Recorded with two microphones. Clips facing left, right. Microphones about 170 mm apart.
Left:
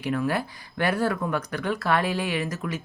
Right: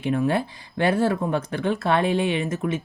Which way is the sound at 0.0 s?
25° right (ahead or behind).